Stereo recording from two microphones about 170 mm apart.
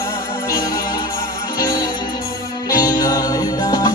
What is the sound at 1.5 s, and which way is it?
Music, 20° left (ahead or behind).